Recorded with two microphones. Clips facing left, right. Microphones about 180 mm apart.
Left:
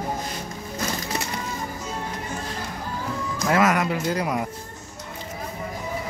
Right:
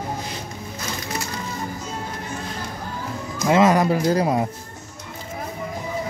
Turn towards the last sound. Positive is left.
turn(degrees=-30)  # may be behind; listen again after turning